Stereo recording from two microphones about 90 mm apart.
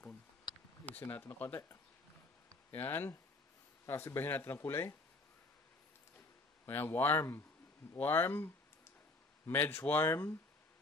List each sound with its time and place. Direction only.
0.8 s speech: 20° left (ahead or behind)
2.7 s speech: 25° left (ahead or behind)
6.6 s speech: 25° left (ahead or behind)
9.5 s speech: 25° left (ahead or behind)